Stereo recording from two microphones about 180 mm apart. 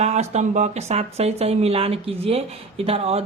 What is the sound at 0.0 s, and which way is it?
Speech, 40° right (ahead or behind).